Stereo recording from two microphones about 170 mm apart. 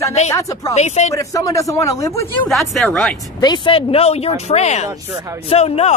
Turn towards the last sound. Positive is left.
turn(degrees=40)  # may be behind; listen again after turning